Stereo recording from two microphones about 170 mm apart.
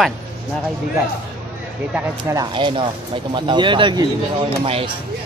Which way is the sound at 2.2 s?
25° right (ahead or behind).